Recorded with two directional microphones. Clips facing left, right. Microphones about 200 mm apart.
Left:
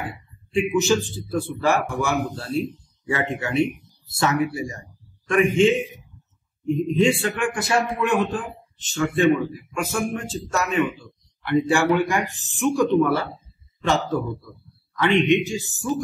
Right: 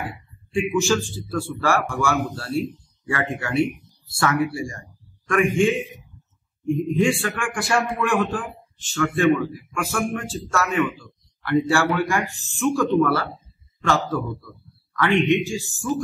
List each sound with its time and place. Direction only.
0.5 s a man's voice: 20° left (ahead or behind)